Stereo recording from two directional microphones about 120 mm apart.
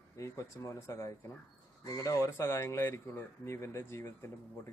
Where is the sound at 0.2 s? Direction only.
25° left (ahead or behind).